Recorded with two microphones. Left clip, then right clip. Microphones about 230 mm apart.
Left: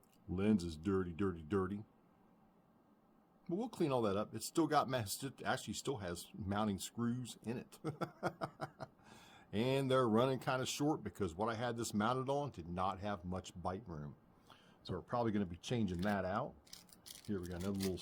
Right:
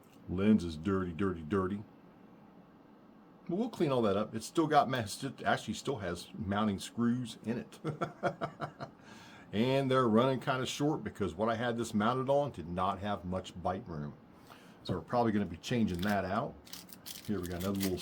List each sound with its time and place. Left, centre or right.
0.3 s speech: left
3.6 s speech: left
14.8 s speech: left